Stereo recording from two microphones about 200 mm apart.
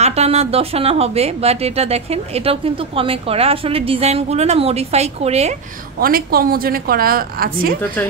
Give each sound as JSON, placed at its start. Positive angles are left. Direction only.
{"t": 0.0, "sound": "a woman's voice", "side_deg": -30}
{"t": 5.9, "sound": "a woman's voice", "side_deg": -45}
{"t": 8.0, "sound": "speech", "side_deg": 10}